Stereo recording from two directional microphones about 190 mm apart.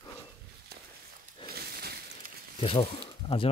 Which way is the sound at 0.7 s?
55° right (ahead or behind).